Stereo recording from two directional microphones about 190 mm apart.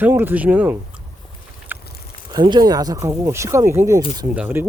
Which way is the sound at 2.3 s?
20° right (ahead or behind).